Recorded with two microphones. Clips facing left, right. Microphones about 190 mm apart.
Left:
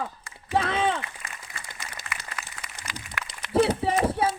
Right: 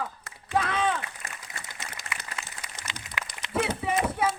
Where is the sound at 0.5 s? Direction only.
30° left (ahead or behind).